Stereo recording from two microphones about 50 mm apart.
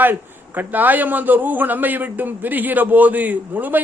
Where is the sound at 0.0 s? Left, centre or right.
Right.